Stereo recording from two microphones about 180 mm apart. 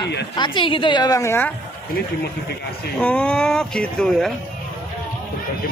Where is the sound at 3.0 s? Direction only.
5° left (ahead or behind).